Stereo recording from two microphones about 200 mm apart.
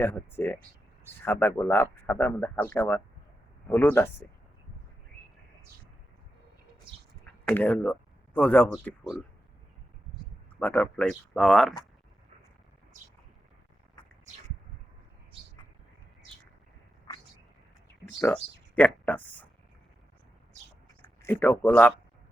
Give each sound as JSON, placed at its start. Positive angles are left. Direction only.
{"t": 0.0, "sound": "speech", "side_deg": 10}
{"t": 7.4, "sound": "speech", "side_deg": 5}
{"t": 10.6, "sound": "speech", "side_deg": 10}
{"t": 17.1, "sound": "a sound", "side_deg": 25}
{"t": 18.8, "sound": "speech", "side_deg": 10}
{"t": 21.2, "sound": "speech", "side_deg": 10}